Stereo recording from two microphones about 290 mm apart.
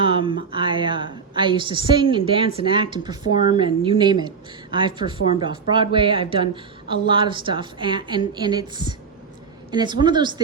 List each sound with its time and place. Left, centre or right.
0.0 s speech: centre